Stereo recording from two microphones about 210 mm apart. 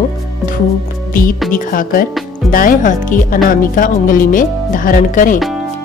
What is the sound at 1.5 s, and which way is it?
Speech, 40° left (ahead or behind).